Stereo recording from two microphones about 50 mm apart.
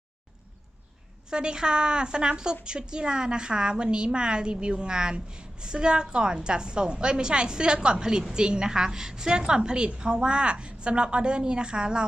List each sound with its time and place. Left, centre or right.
1.3 s a woman's voice: centre